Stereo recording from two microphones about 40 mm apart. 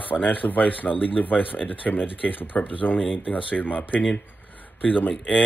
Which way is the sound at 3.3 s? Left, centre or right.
Left.